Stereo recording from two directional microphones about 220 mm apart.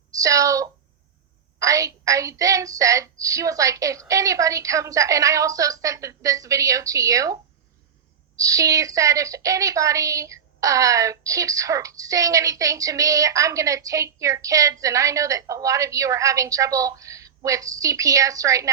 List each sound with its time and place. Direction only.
0.2 s a woman's voice: 15° right (ahead or behind)
8.4 s a woman's voice: 15° right (ahead or behind)